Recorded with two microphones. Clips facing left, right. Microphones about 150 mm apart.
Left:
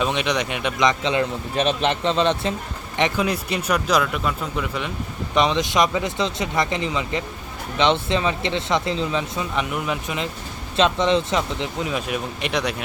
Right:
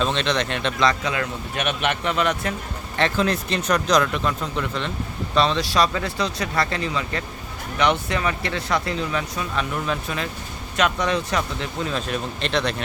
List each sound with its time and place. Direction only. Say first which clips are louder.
0.0 s speech: even; 10° left (ahead or behind)
3.0 s speech: even; 10° left (ahead or behind)
5.3 s speech: left 1 dB; 15° left (ahead or behind)